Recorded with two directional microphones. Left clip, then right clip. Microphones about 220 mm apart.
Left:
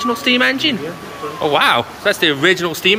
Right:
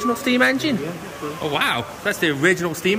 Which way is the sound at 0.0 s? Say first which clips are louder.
Left 4 dB; 20° right (ahead or behind).